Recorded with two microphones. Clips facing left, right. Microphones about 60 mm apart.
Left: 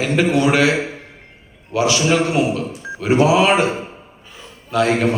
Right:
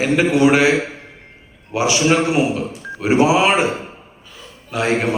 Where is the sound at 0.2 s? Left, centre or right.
Right.